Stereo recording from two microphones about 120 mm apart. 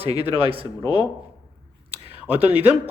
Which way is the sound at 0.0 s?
55° right (ahead or behind).